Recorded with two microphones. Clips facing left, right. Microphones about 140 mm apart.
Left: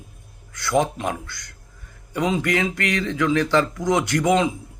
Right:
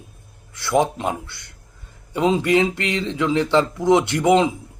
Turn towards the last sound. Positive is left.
turn(degrees=-25)  # may be behind; listen again after turning